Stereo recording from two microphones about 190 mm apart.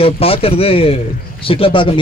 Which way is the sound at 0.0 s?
30° left (ahead or behind).